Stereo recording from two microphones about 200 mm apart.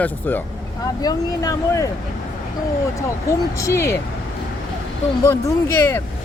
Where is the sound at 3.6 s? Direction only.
15° left (ahead or behind).